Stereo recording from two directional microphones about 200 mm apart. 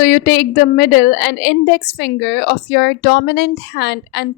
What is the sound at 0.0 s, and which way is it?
A woman's voice, 55° left (ahead or behind).